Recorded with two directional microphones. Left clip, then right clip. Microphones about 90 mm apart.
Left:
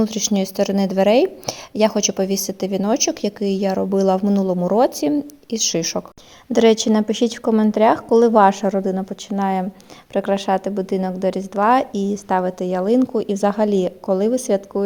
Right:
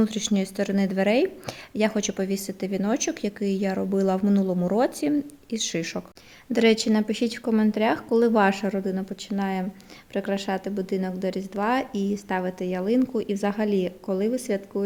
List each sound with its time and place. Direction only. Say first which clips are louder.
0.0 s a woman's voice: left 5 dB; 10° left (ahead or behind)
6.5 s a woman's voice: left 6 dB; 45° left (ahead or behind); by 14.8 s 65° left (ahead or behind)